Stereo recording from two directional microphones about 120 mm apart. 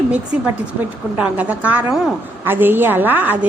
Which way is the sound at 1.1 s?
10° right (ahead or behind).